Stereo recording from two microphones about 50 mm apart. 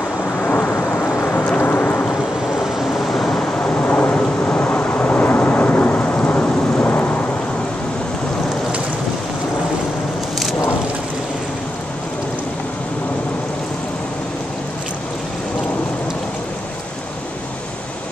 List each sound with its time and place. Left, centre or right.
0.4 s thunder: left
3.2 s a sound: centre
3.5 s thunder: left